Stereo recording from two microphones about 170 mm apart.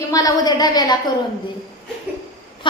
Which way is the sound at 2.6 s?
30° left (ahead or behind).